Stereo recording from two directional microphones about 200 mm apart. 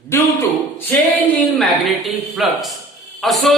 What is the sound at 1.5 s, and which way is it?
A man's voice, centre (ahead or behind).